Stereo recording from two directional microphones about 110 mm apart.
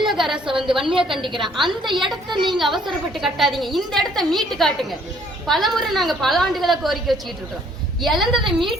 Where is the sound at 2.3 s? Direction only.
45° right (ahead or behind).